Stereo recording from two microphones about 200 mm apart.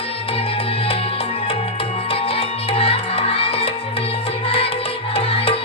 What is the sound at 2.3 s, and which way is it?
Music, 30° left (ahead or behind).